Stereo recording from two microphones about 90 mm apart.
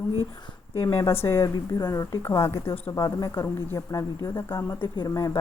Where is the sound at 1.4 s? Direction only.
50° left (ahead or behind).